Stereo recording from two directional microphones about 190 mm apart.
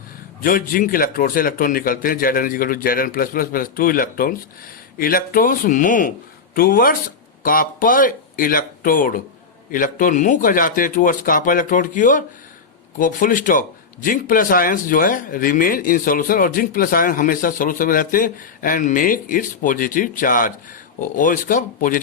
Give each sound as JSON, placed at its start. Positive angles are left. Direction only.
{"t": 0.4, "sound": "speech", "side_deg": 50}